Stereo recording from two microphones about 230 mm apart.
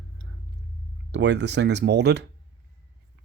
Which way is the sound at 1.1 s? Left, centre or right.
Right.